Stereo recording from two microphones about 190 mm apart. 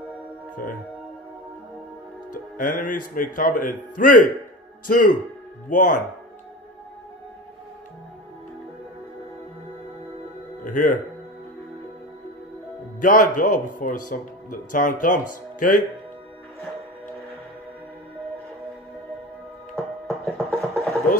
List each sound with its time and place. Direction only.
2.3 s speech: 45° left (ahead or behind)
10.6 s speech: 45° left (ahead or behind)
13.0 s speech: 45° left (ahead or behind)
20.1 s music: 5° left (ahead or behind)